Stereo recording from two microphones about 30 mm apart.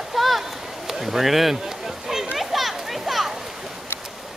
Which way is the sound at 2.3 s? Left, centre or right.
Centre.